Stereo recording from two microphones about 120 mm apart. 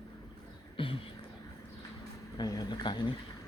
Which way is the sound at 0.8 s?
45° left (ahead or behind).